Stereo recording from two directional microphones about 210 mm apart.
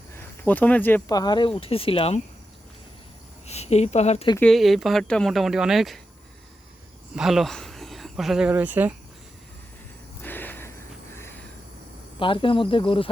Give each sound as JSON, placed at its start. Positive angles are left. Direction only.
{"t": 0.2, "sound": "speech", "side_deg": 10}
{"t": 3.4, "sound": "speech", "side_deg": 30}
{"t": 4.4, "sound": "speech", "side_deg": 0}
{"t": 7.2, "sound": "speech", "side_deg": 0}
{"t": 10.2, "sound": "a sound", "side_deg": 10}
{"t": 12.2, "sound": "speech", "side_deg": 25}